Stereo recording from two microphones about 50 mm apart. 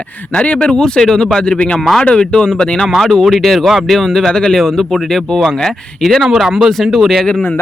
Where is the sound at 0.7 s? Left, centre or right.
Centre.